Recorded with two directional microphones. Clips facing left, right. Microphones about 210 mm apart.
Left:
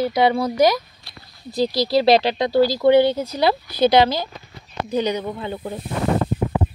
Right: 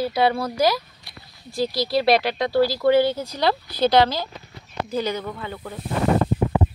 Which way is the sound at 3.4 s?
10° left (ahead or behind).